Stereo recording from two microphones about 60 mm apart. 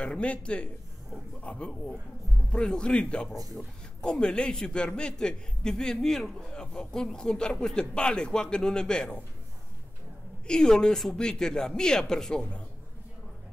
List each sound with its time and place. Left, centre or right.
0.0 s a man's voice: centre
10.4 s a man's voice: centre